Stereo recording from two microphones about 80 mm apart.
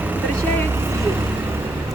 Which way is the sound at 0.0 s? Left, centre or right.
Right.